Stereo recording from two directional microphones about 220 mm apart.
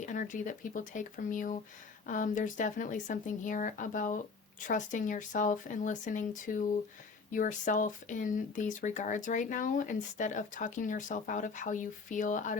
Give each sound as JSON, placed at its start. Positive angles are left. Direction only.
{"t": 0.0, "sound": "speech", "side_deg": 35}